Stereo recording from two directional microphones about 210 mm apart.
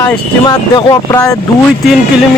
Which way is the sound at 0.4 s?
20° left (ahead or behind).